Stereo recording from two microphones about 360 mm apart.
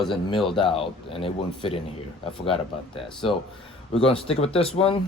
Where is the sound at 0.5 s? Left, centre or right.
Centre.